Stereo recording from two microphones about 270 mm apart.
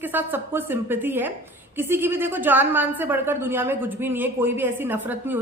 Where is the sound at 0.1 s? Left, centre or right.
Centre.